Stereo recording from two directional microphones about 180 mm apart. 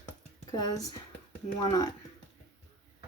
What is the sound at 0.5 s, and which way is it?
Speech, 20° left (ahead or behind).